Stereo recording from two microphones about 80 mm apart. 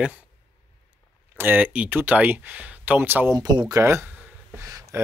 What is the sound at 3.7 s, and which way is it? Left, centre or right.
Speech, right.